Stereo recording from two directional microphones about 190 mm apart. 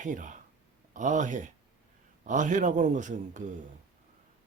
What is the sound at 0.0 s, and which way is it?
A man's voice, 40° right (ahead or behind).